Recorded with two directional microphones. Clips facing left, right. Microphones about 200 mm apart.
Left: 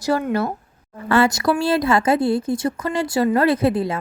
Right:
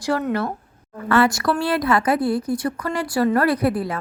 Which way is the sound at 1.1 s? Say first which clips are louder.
Left 1 dB; 25° left (ahead or behind).